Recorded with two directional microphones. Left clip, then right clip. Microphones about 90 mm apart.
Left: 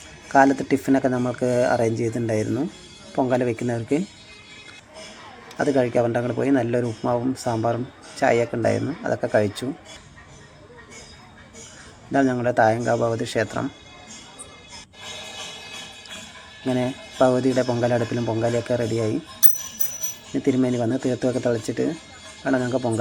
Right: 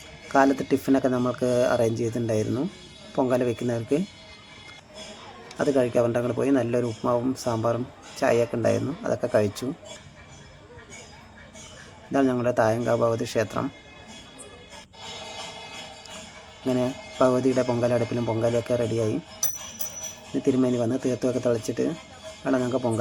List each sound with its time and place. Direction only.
0.3 s speech: 10° left (ahead or behind)
5.5 s speech: 5° left (ahead or behind)
12.1 s speech: 10° left (ahead or behind)
15.4 s music: 35° right (ahead or behind)
16.6 s speech: 5° left (ahead or behind)
20.3 s speech: 10° left (ahead or behind)